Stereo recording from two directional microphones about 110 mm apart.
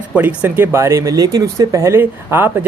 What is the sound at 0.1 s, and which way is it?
Speech, 15° right (ahead or behind).